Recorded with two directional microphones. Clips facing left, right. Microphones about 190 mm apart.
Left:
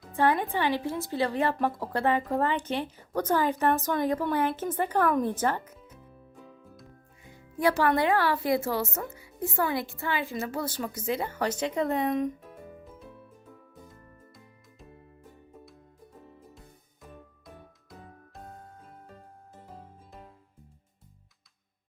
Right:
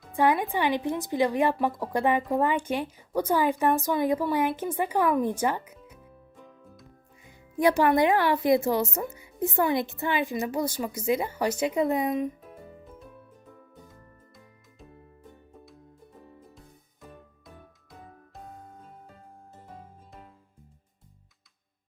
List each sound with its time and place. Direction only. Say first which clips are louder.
0.1 s speech: right 1 dB; 15° right (ahead or behind)
7.6 s speech: right 3 dB; 15° right (ahead or behind)
13.8 s music: left 1 dB; centre (ahead or behind)
16.6 s music: right 1 dB; centre (ahead or behind)